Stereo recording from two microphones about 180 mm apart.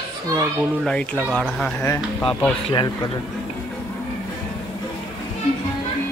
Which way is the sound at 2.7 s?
25° left (ahead or behind).